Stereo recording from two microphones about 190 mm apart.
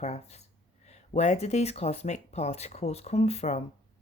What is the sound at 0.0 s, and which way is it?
Speech, 35° left (ahead or behind).